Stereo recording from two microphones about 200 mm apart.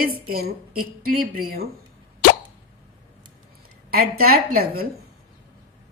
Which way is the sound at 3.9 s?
50° right (ahead or behind).